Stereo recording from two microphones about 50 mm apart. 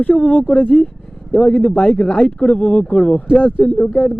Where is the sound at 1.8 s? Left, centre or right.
Left.